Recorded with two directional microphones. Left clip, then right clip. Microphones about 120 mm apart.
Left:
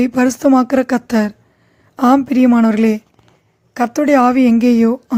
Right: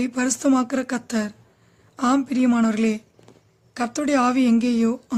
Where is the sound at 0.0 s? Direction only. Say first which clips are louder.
Left 9 dB; 45° left (ahead or behind).